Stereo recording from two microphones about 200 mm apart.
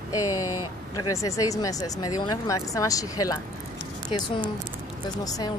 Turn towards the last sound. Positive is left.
turn(degrees=20)  # may be behind; listen again after turning